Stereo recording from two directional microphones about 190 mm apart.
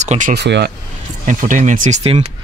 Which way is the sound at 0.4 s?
65° right (ahead or behind).